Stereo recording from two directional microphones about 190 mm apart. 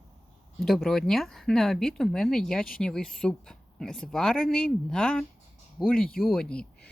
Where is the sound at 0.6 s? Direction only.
Centre (ahead or behind).